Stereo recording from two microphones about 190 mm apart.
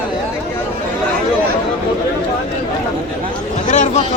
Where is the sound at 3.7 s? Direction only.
35° left (ahead or behind).